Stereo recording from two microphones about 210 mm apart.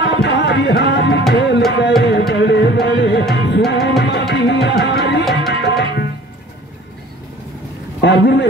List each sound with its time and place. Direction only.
0.0 s music: 55° left (ahead or behind)
5.5 s tabla: 55° left (ahead or behind)
8.0 s a man's voice: 55° left (ahead or behind)